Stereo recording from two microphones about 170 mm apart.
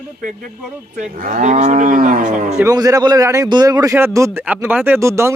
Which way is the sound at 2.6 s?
20° right (ahead or behind).